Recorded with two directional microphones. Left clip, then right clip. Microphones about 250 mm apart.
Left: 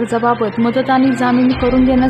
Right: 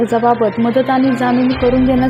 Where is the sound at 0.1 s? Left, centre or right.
Centre.